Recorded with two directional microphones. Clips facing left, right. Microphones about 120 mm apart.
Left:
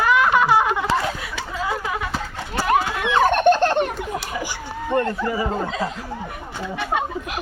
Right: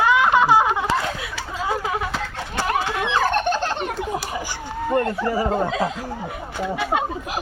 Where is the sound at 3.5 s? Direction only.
10° right (ahead or behind).